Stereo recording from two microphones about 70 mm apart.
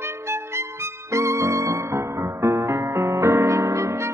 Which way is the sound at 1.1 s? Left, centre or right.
Right.